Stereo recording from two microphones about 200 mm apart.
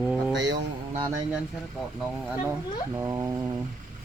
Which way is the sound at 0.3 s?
65° right (ahead or behind).